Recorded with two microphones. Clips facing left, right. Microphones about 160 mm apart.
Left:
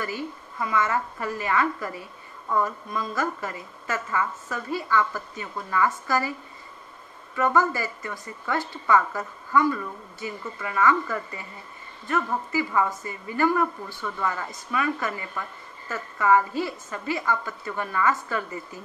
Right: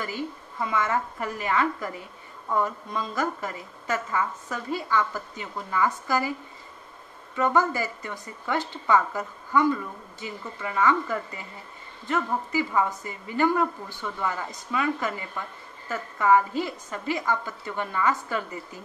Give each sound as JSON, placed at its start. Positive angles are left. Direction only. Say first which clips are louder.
{"t": 0.6, "sound": "a woman's voice", "louder": "left 1 dB", "side_deg": -20}
{"t": 7.3, "sound": "a woman's voice", "louder": "left 1 dB", "side_deg": -15}